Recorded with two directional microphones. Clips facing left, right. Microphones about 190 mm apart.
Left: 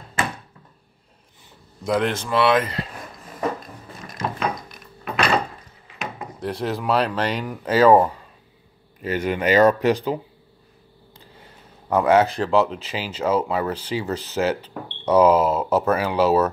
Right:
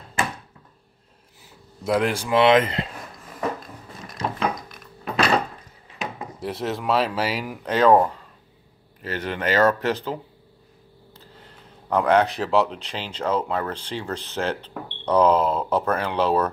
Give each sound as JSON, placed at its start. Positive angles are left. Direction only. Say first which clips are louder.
{"t": 1.9, "sound": "speech", "louder": "even", "side_deg": -5}
{"t": 4.2, "sound": "a sound", "louder": "even", "side_deg": 0}
{"t": 5.9, "sound": "speech", "louder": "even", "side_deg": 0}